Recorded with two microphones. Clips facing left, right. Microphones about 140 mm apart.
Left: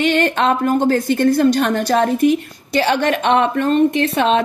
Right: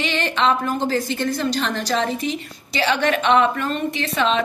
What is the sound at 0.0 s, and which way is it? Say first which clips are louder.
A woman's voice: left 5 dB; 50° left (ahead or behind).